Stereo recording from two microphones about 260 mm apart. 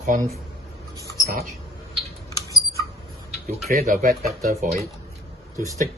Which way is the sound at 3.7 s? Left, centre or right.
Right.